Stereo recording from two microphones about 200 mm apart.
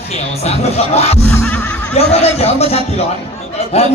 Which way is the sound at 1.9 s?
30° left (ahead or behind).